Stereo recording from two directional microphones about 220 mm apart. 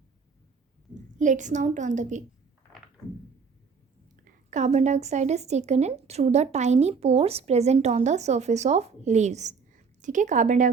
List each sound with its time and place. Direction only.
1.2 s a woman's voice: 35° right (ahead or behind)
4.2 s a woman's voice: 35° right (ahead or behind)